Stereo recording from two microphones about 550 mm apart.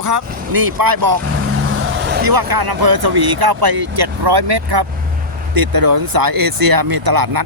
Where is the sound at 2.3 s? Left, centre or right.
Right.